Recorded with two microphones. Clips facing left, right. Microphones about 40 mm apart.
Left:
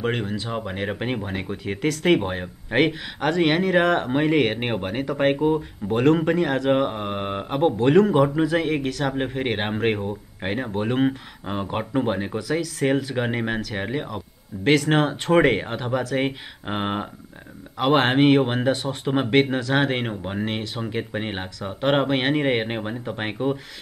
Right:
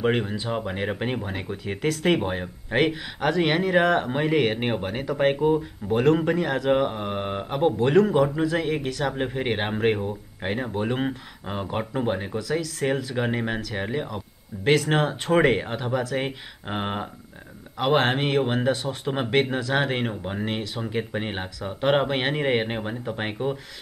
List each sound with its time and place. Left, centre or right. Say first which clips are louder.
0.0 s speech: right 2 dB; centre
7.8 s speech: left 3 dB; centre
16.3 s speech: left 3 dB; centre